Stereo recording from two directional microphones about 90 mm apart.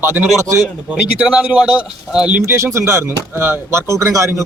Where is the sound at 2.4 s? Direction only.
30° right (ahead or behind).